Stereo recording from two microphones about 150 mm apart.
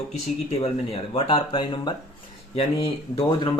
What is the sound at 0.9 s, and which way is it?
Speech, 40° left (ahead or behind).